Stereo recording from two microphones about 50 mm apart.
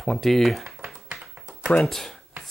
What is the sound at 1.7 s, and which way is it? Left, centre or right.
Speech, centre.